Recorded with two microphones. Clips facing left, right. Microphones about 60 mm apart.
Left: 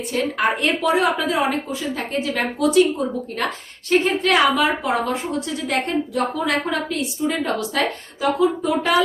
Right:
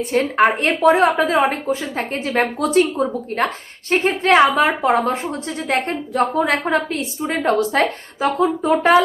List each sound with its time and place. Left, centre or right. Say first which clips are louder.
0.1 s a woman's voice: right 5 dB; right